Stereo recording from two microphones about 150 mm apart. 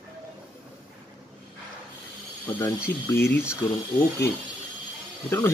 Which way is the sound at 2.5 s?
15° left (ahead or behind).